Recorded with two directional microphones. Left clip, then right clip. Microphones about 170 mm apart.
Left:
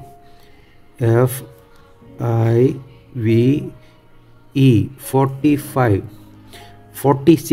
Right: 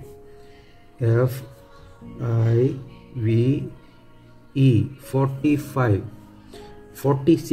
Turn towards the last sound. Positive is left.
turn(degrees=65)  # may be behind; listen again after turning